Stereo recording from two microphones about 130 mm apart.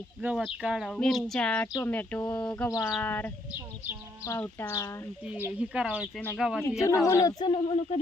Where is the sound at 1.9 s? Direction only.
10° left (ahead or behind).